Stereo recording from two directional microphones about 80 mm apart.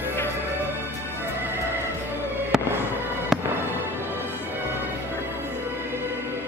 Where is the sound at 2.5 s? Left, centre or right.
Centre.